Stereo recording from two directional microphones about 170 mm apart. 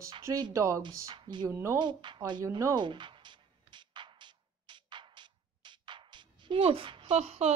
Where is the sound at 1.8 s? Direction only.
25° right (ahead or behind).